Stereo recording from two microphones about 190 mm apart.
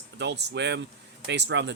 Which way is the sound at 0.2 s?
65° right (ahead or behind).